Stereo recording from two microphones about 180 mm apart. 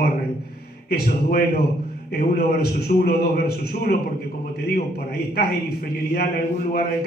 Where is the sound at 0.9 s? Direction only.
60° left (ahead or behind).